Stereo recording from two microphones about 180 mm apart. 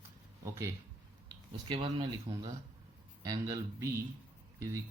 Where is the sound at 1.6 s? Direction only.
30° right (ahead or behind).